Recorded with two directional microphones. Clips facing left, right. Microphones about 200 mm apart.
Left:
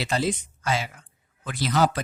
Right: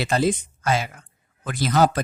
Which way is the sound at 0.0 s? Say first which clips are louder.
Right 4 dB; 50° right (ahead or behind).